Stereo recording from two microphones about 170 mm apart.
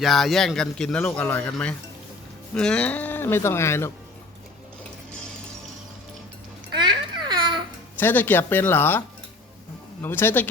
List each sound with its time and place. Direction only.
0.0 s speech: centre (ahead or behind)
6.7 s babbling: 25° right (ahead or behind)
7.9 s speech: 10° left (ahead or behind)